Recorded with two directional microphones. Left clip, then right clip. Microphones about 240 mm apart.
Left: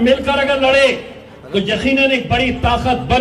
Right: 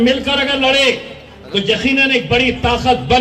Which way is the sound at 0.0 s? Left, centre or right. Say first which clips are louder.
Left 1 dB; right.